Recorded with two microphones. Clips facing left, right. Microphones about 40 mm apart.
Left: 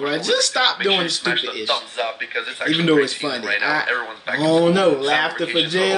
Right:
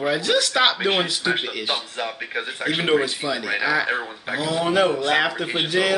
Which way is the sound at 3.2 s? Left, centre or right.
Centre.